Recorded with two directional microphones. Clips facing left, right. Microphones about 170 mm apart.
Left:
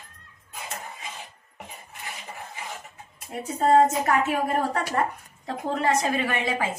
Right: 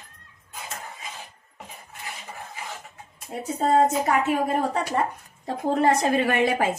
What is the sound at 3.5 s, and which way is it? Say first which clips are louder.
A woman's voice: left 1 dB; 15° right (ahead or behind).